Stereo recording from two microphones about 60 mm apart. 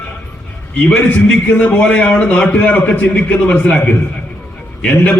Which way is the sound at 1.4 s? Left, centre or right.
Left.